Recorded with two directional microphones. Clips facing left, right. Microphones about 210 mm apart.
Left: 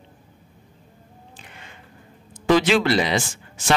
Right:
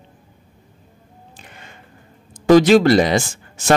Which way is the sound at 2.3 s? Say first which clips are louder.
Right 7 dB; 40° right (ahead or behind).